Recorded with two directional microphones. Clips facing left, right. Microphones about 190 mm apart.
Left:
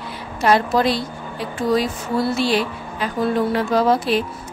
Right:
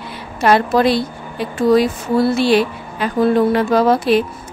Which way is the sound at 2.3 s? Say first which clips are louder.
Right 5 dB; 60° right (ahead or behind).